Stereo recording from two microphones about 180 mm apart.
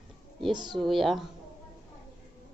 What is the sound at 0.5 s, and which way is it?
Speech, 25° right (ahead or behind).